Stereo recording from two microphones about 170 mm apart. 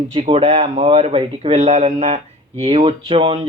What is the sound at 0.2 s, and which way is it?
Speech, 35° right (ahead or behind).